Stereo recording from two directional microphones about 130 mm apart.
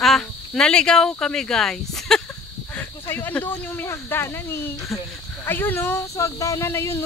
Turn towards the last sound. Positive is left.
turn(degrees=20)  # may be behind; listen again after turning